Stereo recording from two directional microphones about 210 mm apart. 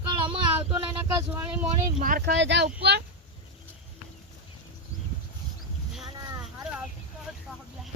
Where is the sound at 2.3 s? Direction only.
55° right (ahead or behind).